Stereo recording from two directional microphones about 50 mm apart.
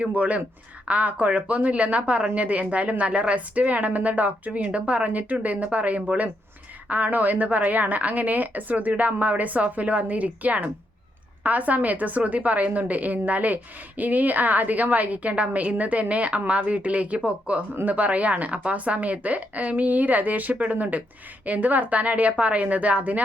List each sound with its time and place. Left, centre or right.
0.0 s a woman's voice: right